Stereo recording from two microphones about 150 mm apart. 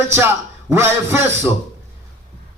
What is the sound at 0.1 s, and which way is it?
A man's voice, 15° right (ahead or behind).